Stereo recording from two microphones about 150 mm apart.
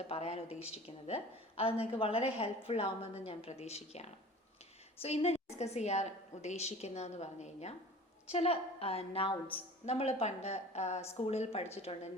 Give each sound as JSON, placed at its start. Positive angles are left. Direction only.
{"t": 0.1, "sound": "a woman's voice", "side_deg": 45}